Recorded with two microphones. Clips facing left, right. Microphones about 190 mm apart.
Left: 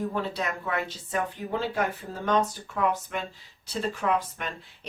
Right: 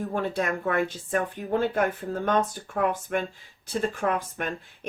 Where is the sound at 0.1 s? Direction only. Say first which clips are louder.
Right 3 dB; 50° right (ahead or behind).